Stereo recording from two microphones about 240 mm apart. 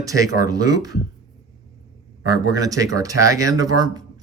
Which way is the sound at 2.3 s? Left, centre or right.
Centre.